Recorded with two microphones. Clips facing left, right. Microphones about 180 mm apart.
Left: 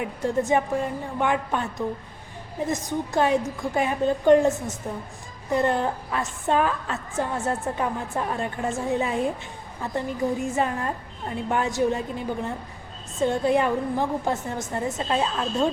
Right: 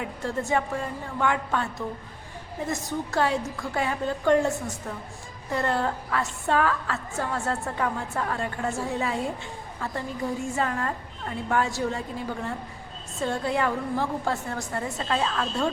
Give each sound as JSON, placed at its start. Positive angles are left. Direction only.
{"t": 0.0, "sound": "a woman's voice", "side_deg": 20}